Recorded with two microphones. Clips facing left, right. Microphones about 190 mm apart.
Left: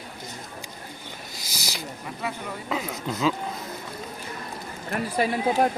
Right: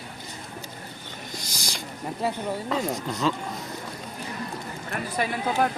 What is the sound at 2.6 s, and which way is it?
Speech, centre (ahead or behind).